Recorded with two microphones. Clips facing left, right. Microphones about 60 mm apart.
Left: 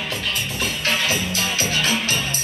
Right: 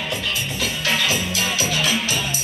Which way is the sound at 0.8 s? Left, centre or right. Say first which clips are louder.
Right 1 dB; left.